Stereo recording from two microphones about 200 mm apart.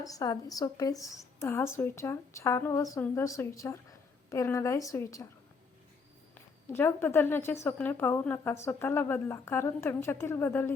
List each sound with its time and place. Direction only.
0.0 s a woman's voice: 20° left (ahead or behind)
6.3 s a woman's voice: 10° left (ahead or behind)